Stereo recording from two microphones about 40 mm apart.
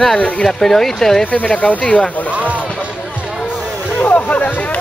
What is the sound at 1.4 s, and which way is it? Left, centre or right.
Speech, left.